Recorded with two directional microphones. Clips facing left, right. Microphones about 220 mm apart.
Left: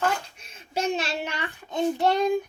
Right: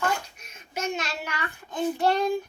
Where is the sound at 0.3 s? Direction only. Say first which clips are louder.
Left 4 dB; 30° left (ahead or behind).